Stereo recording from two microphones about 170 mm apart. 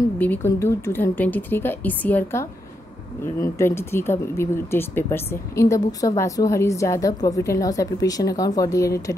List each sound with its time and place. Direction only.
0.2 s speech: 10° left (ahead or behind)